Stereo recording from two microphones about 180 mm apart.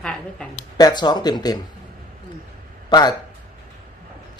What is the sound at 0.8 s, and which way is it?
Speech, 20° left (ahead or behind).